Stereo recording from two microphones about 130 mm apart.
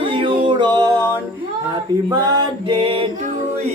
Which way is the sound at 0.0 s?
40° right (ahead or behind).